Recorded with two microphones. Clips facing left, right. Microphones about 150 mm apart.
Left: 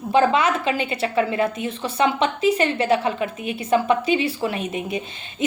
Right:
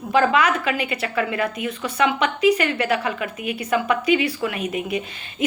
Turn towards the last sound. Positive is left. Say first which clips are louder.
# right 1 dB
turn(degrees=25)  # may be behind; listen again after turning